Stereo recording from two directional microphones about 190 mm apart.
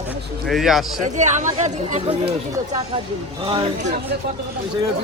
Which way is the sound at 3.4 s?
30° right (ahead or behind).